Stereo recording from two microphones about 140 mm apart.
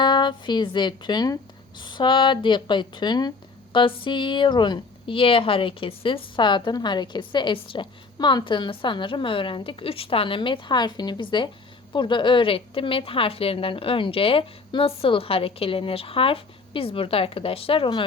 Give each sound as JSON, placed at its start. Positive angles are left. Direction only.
{"t": 0.0, "sound": "speech", "side_deg": 35}